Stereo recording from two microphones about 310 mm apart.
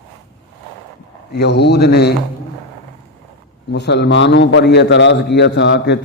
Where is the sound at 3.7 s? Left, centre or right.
Left.